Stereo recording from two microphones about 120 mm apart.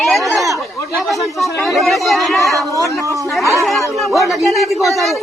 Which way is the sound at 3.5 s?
Centre (ahead or behind).